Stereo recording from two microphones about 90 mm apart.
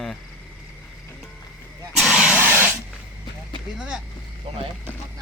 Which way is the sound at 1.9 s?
5° right (ahead or behind).